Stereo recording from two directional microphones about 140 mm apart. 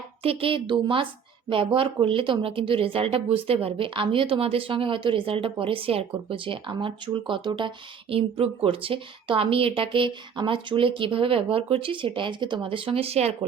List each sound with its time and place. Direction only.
0.2 s speech: 40° right (ahead or behind)